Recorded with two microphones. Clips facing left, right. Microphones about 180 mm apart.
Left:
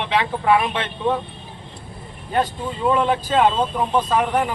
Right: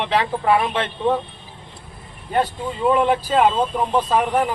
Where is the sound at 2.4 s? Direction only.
5° right (ahead or behind).